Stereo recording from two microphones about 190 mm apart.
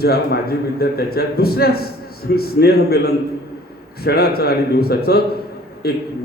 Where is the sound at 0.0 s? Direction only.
55° left (ahead or behind).